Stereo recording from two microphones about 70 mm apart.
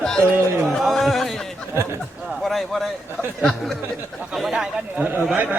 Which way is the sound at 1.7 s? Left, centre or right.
Right.